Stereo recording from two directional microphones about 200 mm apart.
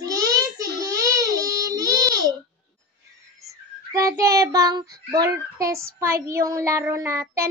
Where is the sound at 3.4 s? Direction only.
15° right (ahead or behind).